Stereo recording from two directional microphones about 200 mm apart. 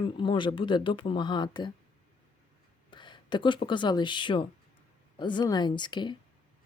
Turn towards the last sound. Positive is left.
turn(degrees=20)  # may be behind; listen again after turning